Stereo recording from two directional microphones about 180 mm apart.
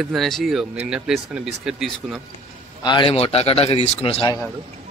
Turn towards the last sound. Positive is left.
turn(degrees=30)  # may be behind; listen again after turning